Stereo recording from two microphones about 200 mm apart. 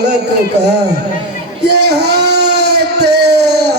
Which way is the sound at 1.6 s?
55° right (ahead or behind).